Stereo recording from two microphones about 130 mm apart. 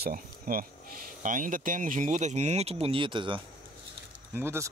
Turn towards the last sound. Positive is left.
turn(degrees=-20)  # may be behind; listen again after turning